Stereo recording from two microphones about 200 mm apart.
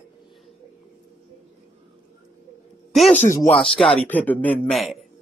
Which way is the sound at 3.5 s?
Centre (ahead or behind).